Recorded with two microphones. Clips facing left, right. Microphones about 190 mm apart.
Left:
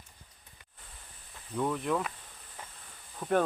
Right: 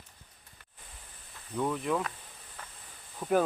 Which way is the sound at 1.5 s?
Centre (ahead or behind).